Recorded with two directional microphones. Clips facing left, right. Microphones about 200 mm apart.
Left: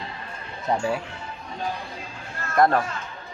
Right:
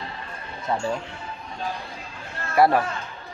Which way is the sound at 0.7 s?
10° left (ahead or behind).